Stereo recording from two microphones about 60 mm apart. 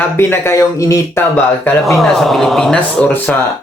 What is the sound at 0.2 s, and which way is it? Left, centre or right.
Speech, left.